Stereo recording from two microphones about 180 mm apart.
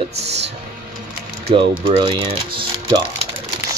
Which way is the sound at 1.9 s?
30° right (ahead or behind).